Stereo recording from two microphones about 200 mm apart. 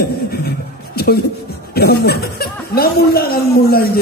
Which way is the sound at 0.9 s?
50° left (ahead or behind).